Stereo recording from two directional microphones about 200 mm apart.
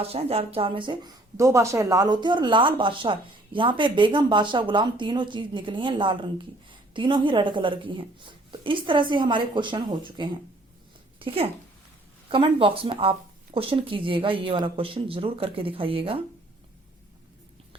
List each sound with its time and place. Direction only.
0.0 s speech: 30° right (ahead or behind)
12.3 s speech: 25° right (ahead or behind)